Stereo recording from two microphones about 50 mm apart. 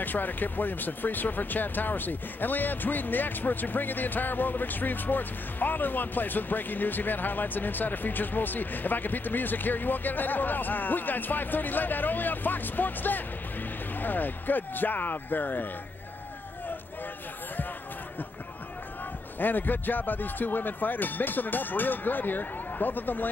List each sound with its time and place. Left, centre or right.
0.0 s speech: left
19.4 s speech: left